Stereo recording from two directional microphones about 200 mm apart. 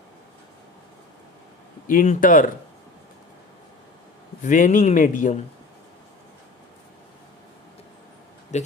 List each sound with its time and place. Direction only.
1.9 s speech: 40° left (ahead or behind)
4.4 s speech: 40° left (ahead or behind)
8.5 s speech: 35° left (ahead or behind)